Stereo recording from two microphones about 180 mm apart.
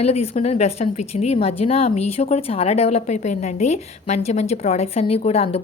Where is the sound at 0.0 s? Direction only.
35° left (ahead or behind).